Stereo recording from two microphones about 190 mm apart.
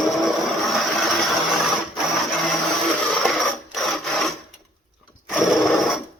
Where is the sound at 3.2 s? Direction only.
Centre (ahead or behind).